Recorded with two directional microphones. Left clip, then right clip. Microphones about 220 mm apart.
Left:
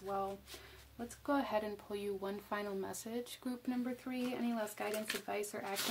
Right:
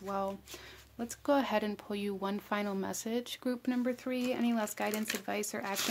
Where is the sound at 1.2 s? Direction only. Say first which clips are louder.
Right 6 dB; 40° right (ahead or behind).